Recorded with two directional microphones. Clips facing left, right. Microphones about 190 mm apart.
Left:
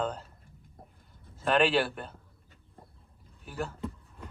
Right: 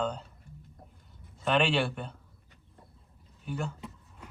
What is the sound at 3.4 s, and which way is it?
Speech, 5° left (ahead or behind).